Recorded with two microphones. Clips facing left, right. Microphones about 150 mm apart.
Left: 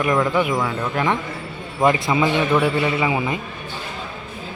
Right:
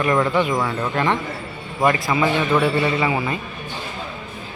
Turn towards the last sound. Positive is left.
turn(degrees=15)  # may be behind; listen again after turning